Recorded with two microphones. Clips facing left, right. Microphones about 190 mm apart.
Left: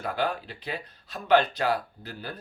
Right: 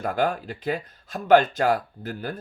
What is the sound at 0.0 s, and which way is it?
Speech, 45° right (ahead or behind).